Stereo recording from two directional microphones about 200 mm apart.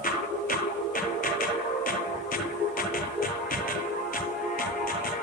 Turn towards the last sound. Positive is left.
turn(degrees=45)  # may be behind; listen again after turning